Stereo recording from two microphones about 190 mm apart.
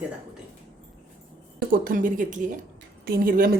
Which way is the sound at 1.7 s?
50° right (ahead or behind).